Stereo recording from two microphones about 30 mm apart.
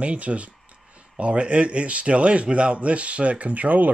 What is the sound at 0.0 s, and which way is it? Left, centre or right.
A man's voice, right.